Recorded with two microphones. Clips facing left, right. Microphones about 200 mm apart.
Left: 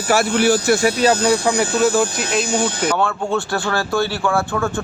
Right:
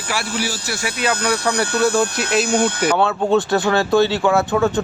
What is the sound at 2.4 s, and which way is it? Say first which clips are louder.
Speech: right 2 dB; 60° right (ahead or behind).